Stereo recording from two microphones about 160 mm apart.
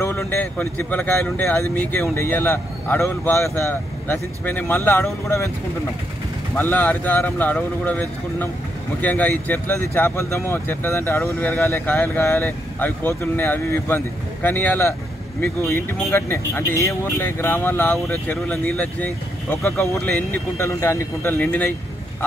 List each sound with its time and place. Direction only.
0.0 s speech: 15° left (ahead or behind)
6.5 s speech: 15° left (ahead or behind)
9.0 s speech: 10° left (ahead or behind)
19.5 s speech: 15° left (ahead or behind)